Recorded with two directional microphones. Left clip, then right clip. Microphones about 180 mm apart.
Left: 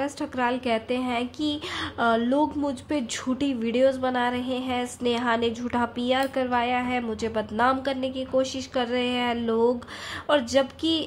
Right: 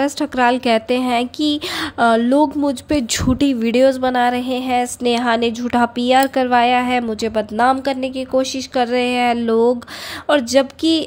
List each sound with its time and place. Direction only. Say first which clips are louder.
0.0 s a woman's voice: right 11 dB; 35° right (ahead or behind)